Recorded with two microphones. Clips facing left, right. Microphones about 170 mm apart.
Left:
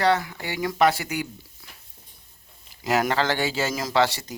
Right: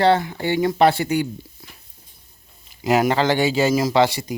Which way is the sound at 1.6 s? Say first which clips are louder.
Right 4 dB; 25° right (ahead or behind).